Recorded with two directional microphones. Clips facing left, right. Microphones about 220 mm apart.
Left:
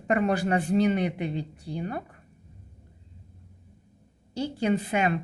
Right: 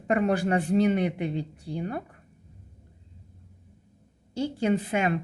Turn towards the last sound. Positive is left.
turn(degrees=-50)  # may be behind; listen again after turning